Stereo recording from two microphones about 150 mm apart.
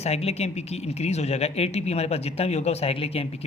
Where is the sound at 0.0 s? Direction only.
45° left (ahead or behind).